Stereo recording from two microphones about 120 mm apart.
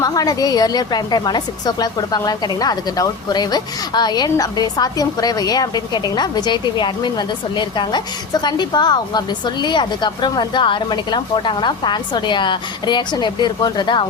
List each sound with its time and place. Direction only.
0.0 s a woman's voice: 30° left (ahead or behind)